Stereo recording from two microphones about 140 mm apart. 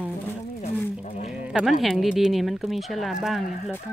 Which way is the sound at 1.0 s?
60° left (ahead or behind).